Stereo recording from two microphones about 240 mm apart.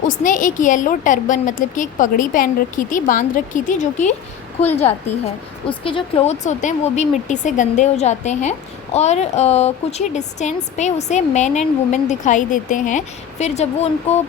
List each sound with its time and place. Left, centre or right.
0.1 s a woman's voice: left
5.2 s speech: left